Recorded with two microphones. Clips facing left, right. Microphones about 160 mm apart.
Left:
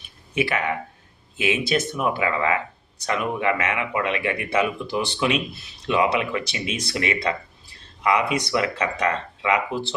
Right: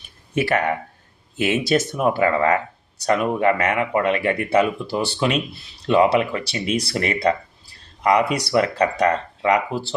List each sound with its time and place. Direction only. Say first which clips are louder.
0.3 s speech: right 4 dB; 45° right (ahead or behind)